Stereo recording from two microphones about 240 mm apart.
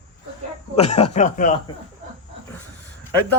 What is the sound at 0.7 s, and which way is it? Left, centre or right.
Speech, left.